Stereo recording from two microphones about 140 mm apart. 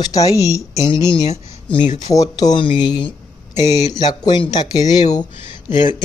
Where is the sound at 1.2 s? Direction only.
45° left (ahead or behind).